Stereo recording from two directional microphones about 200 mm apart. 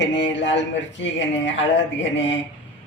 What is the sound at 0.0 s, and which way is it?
A man's voice, 65° left (ahead or behind).